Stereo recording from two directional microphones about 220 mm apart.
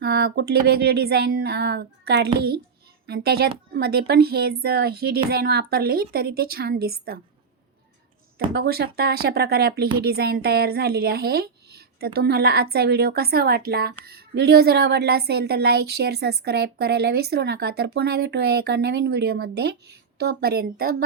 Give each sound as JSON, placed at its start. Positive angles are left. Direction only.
{"t": 0.0, "sound": "a woman's voice", "side_deg": -45}
{"t": 8.5, "sound": "a woman's voice", "side_deg": -45}